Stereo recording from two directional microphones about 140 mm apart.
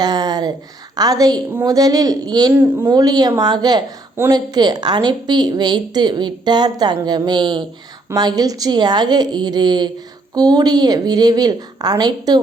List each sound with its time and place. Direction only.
0.0 s a woman's voice: 30° right (ahead or behind)
2.5 s speech: 15° right (ahead or behind)
2.9 s a woman's voice: 30° right (ahead or behind)